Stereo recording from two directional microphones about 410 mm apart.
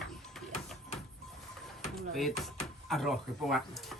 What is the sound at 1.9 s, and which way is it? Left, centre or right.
Speech, centre.